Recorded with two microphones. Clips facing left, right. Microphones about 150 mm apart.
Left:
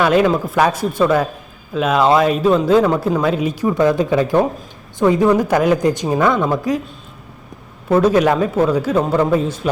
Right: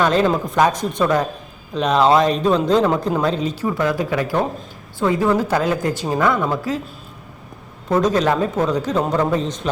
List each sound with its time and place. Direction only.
0.0 s a man's voice: 10° left (ahead or behind)
7.9 s a man's voice: 10° left (ahead or behind)